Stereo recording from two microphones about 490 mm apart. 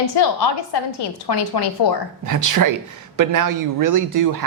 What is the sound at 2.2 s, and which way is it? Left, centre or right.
Speech, right.